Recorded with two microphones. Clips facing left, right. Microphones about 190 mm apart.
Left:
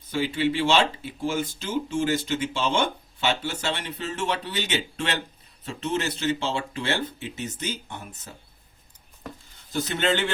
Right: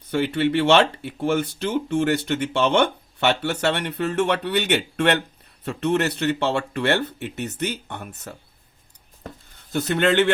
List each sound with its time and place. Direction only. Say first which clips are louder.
0.1 s speech: right 4 dB; 60° right (ahead or behind)
9.6 s speech: right 5 dB; 60° right (ahead or behind)